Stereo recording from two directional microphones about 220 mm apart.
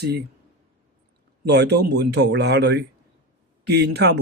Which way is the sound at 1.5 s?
50° right (ahead or behind).